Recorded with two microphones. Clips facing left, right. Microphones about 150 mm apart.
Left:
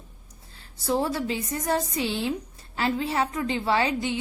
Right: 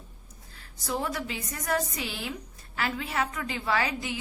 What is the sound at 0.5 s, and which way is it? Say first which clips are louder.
A woman's voice: left 7 dB; 30° left (ahead or behind).